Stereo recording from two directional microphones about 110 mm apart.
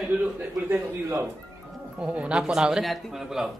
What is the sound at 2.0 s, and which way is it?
A man's voice, 10° right (ahead or behind).